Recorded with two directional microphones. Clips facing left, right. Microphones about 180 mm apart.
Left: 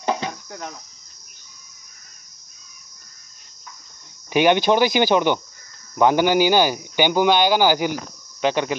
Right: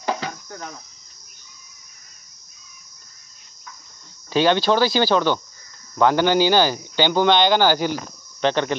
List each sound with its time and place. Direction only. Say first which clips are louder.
4.3 s speech: left 1 dB; 15° left (ahead or behind)